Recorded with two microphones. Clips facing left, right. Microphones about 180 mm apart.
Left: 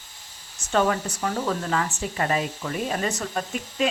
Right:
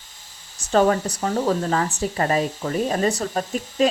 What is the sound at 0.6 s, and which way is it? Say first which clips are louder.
Speech: right 5 dB; 35° right (ahead or behind).